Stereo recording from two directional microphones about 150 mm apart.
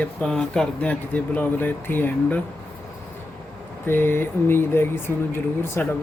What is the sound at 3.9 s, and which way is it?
Speech, 15° left (ahead or behind).